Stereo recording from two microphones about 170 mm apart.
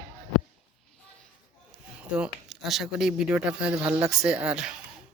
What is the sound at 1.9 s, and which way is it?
Speech, 5° right (ahead or behind).